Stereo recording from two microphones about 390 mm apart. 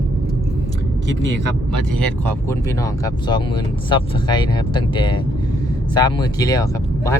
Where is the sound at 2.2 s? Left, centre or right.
Centre.